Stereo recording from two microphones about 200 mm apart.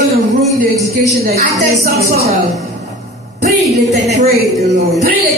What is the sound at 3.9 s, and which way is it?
Speech, 35° right (ahead or behind).